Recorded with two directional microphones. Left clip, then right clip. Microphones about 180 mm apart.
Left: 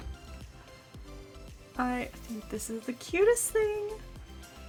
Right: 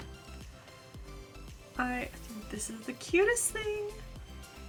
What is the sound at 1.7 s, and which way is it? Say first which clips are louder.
Speech: left 2 dB; 40° left (ahead or behind).